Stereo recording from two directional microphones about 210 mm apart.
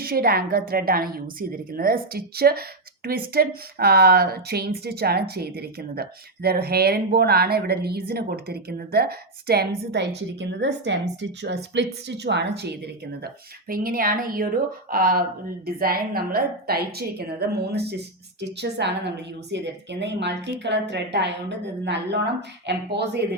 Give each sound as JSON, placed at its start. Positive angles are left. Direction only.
{"t": 0.0, "sound": "a woman's voice", "side_deg": -45}